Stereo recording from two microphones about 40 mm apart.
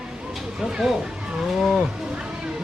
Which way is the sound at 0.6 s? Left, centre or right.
Centre.